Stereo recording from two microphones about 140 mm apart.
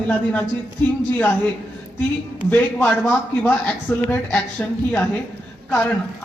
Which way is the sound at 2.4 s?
15° left (ahead or behind).